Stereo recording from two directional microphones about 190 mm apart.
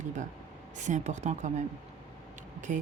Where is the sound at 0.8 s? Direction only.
40° right (ahead or behind).